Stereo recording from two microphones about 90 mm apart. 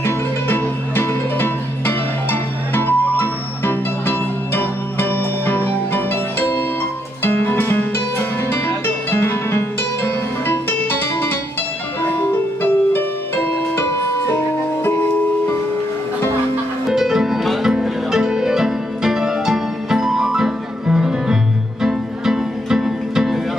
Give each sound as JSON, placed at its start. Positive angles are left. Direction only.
{"t": 0.0, "sound": "music", "side_deg": 25}
{"t": 16.9, "sound": "music", "side_deg": -5}